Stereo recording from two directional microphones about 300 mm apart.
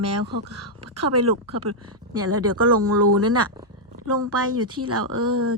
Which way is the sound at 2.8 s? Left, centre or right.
Right.